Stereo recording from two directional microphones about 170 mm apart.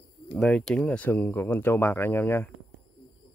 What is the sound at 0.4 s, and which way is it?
Speech, 5° left (ahead or behind).